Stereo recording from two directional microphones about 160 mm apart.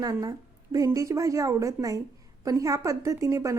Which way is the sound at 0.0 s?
25° right (ahead or behind).